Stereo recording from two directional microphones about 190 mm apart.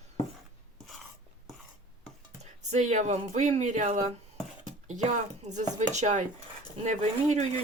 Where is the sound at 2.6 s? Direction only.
40° right (ahead or behind).